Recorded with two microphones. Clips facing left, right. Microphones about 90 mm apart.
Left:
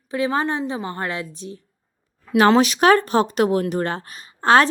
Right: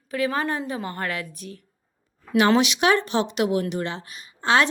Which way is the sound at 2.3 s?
40° left (ahead or behind).